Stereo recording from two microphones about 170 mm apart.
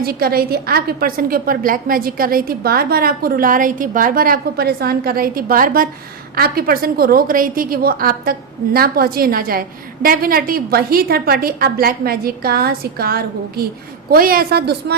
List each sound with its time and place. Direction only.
0.0 s a woman's voice: 65° right (ahead or behind)